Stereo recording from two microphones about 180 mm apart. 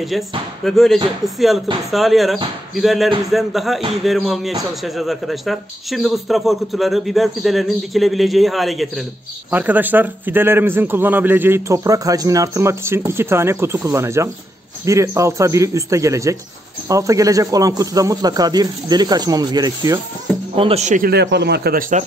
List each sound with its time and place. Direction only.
0.7 s a man's voice: centre (ahead or behind); by 20.0 s 20° right (ahead or behind)
20.5 s speech: 35° right (ahead or behind)
21.1 s speech: 70° right (ahead or behind)